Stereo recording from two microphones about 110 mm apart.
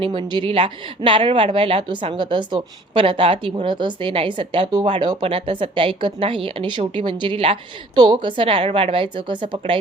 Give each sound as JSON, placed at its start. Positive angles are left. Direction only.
{"t": 0.0, "sound": "a woman's voice", "side_deg": -45}
{"t": 7.9, "sound": "a woman's voice", "side_deg": -40}